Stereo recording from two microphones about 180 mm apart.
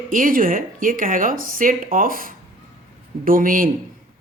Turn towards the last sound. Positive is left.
turn(degrees=-50)  # may be behind; listen again after turning